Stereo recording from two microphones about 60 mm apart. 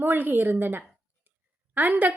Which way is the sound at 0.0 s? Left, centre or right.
Right.